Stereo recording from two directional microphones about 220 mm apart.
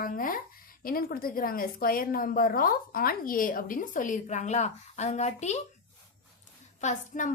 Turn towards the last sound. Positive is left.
turn(degrees=35)  # may be behind; listen again after turning